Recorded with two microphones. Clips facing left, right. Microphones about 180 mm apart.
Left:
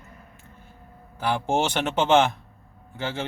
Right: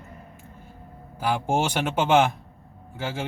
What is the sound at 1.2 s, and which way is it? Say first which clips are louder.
A man's voice: even; 10° right (ahead or behind).